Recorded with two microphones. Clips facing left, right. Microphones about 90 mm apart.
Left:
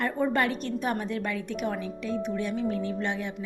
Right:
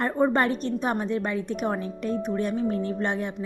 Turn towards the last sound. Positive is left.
turn(degrees=-40)  # may be behind; listen again after turning